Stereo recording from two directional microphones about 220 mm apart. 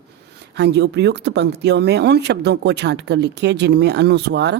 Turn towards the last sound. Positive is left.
turn(degrees=-50)  # may be behind; listen again after turning